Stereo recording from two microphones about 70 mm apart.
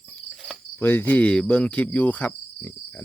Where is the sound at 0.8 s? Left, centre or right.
Left.